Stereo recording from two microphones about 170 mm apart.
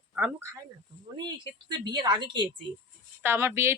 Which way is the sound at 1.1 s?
25° right (ahead or behind).